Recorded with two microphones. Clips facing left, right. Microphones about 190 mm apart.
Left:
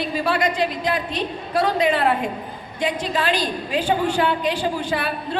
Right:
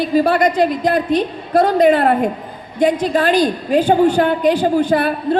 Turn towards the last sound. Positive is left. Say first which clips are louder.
# right 9 dB
turn(degrees=-45)  # may be behind; listen again after turning